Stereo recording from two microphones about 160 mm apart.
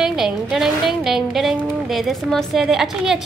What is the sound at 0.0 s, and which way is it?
A woman's voice, 5° right (ahead or behind).